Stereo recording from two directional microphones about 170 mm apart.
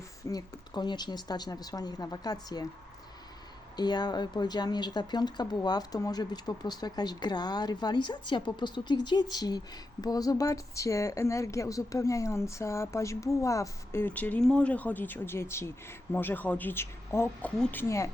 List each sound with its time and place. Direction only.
0.3 s speech: 25° left (ahead or behind)
3.8 s a woman's voice: 25° left (ahead or behind)